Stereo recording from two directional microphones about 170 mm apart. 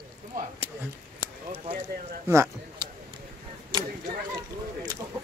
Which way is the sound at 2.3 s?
15° right (ahead or behind).